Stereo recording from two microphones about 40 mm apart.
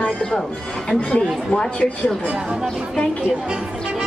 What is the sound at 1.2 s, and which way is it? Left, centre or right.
Speech, centre.